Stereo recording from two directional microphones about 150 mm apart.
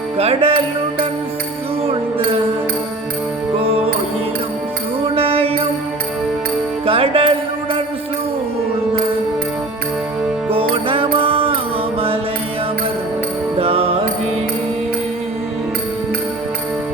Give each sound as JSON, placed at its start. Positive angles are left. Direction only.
{"t": 0.2, "sound": "music", "side_deg": -40}
{"t": 5.1, "sound": "music", "side_deg": -40}
{"t": 6.8, "sound": "music", "side_deg": -35}
{"t": 10.5, "sound": "music", "side_deg": -40}
{"t": 13.6, "sound": "music", "side_deg": -40}